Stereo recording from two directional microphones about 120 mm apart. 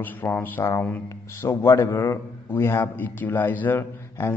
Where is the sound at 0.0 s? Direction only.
15° left (ahead or behind).